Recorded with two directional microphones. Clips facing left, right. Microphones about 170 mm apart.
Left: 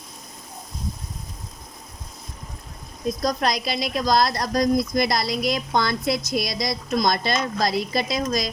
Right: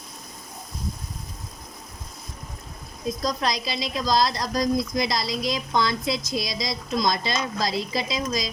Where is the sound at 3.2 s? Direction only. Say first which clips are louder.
Left 3 dB; 60° left (ahead or behind).